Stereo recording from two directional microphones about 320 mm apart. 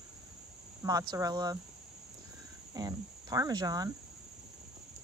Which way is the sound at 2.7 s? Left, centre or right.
Centre.